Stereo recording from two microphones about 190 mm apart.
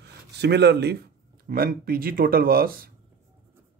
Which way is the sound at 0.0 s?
60° right (ahead or behind).